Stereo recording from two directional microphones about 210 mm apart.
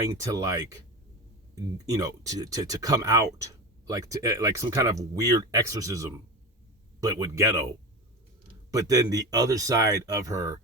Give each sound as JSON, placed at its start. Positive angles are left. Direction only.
{"t": 0.0, "sound": "speech", "side_deg": -15}
{"t": 8.7, "sound": "speech", "side_deg": -15}